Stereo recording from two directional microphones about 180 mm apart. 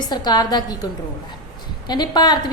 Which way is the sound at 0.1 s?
25° left (ahead or behind).